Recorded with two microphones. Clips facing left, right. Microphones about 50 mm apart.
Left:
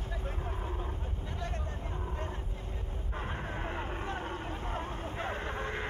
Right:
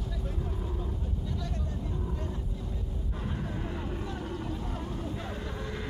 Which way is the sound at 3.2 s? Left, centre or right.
Left.